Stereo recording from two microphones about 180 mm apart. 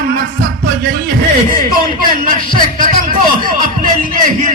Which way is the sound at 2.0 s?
50° right (ahead or behind).